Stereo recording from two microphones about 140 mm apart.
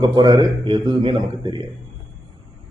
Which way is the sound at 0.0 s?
30° right (ahead or behind).